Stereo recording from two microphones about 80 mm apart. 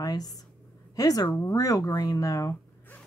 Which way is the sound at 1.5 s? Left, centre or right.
Left.